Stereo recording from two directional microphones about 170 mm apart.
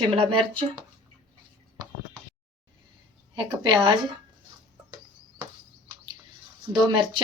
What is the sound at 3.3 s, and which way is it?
Speech, 30° right (ahead or behind).